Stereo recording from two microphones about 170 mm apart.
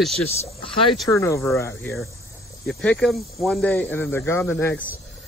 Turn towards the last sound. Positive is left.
turn(degrees=15)  # may be behind; listen again after turning